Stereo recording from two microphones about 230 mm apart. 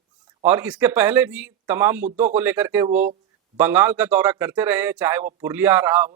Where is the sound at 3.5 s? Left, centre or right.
Centre.